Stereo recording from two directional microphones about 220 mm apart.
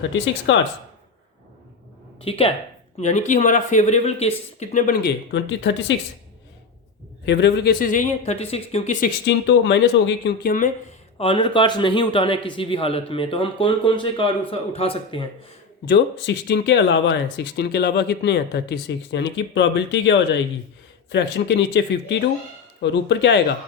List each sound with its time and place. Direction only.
0.5 s speech: 55° left (ahead or behind)
2.2 s a man's voice: 25° left (ahead or behind)
5.3 s speech: 55° left (ahead or behind)
7.3 s speech: 50° left (ahead or behind); by 9.0 s 30° left (ahead or behind)
9.2 s speech: 55° left (ahead or behind)
11.2 s a man's voice: 25° left (ahead or behind)
15.9 s speech: 50° left (ahead or behind)